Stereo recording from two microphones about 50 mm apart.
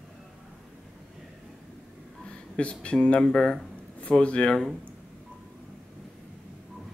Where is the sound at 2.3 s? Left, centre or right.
Left.